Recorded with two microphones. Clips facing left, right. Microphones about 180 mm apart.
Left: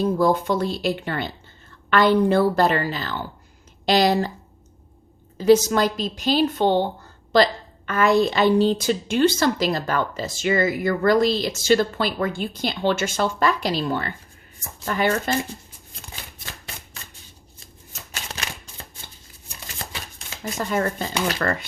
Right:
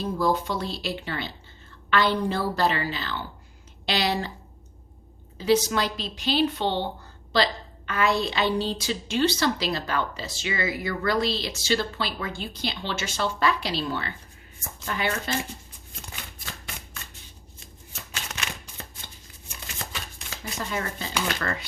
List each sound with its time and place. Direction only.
0.2 s a woman's voice: 50° left (ahead or behind)
5.4 s a woman's voice: 45° left (ahead or behind)
18.1 s shuffling cards: 40° left (ahead or behind)
20.4 s a woman's voice: 50° left (ahead or behind)